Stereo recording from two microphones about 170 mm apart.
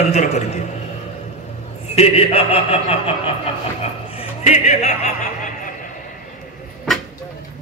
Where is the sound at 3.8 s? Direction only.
35° left (ahead or behind).